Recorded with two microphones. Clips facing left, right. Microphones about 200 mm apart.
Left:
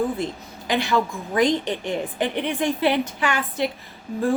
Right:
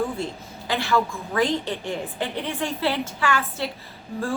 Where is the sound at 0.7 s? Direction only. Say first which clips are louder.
Left 1 dB; 15° left (ahead or behind).